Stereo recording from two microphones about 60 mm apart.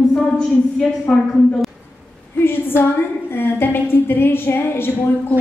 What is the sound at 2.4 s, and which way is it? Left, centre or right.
A woman's voice, left.